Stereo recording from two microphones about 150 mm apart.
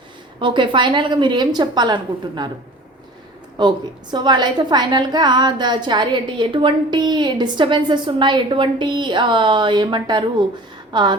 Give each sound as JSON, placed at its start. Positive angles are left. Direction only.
{"t": 0.3, "sound": "a woman's voice", "side_deg": -35}
{"t": 3.6, "sound": "a woman's voice", "side_deg": -30}